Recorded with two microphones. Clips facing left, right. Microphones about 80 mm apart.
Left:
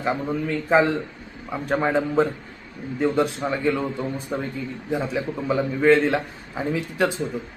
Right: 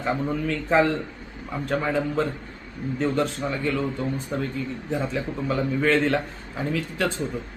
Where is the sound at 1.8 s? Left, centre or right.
Left.